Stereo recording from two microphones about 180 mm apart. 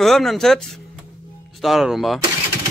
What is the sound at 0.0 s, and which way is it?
A man's voice, centre (ahead or behind).